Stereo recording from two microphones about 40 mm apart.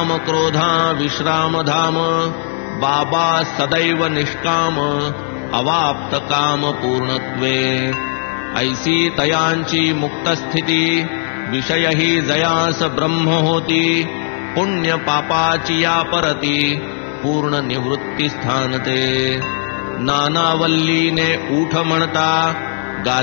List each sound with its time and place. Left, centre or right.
0.0 s mantra: centre